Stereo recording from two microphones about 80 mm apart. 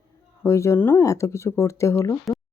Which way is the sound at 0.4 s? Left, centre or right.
Left.